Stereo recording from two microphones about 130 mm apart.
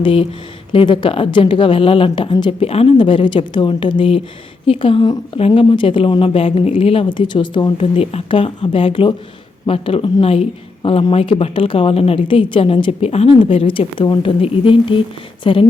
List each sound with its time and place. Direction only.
0.0 s a woman's voice: 40° left (ahead or behind)